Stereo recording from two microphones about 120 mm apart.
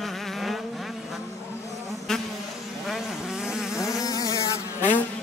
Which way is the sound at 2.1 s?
5° left (ahead or behind).